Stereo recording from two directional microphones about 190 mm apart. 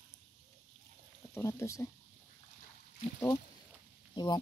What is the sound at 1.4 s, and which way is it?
Speech, 15° left (ahead or behind).